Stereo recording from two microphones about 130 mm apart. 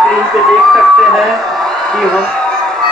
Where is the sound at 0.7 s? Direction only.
Centre (ahead or behind).